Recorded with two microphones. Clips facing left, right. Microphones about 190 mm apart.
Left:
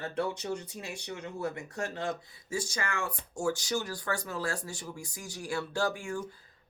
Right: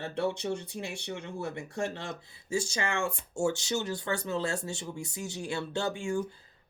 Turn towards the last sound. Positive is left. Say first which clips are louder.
# right 3 dB
turn(degrees=-25)  # may be behind; listen again after turning